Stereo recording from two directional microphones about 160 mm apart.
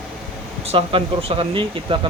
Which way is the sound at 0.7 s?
35° right (ahead or behind).